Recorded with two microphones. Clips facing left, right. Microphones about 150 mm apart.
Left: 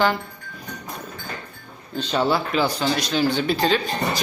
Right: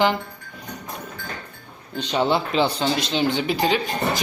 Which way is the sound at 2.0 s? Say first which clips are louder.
Even; 15° right (ahead or behind).